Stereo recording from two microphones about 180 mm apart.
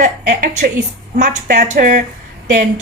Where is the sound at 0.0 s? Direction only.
45° right (ahead or behind).